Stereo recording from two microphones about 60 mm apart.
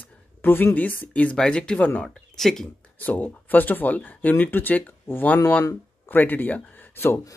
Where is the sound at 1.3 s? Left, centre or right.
Centre.